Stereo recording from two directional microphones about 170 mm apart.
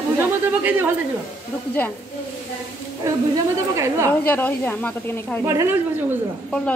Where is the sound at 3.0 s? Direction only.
15° right (ahead or behind).